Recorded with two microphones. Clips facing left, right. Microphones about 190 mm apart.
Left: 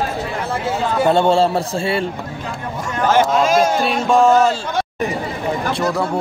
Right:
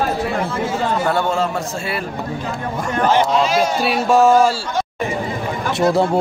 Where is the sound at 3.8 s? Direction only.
5° right (ahead or behind).